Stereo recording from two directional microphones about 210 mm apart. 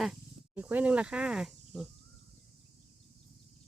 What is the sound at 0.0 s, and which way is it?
Speech, 5° right (ahead or behind).